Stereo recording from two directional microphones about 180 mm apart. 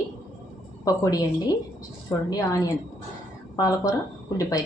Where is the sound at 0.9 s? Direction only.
20° left (ahead or behind).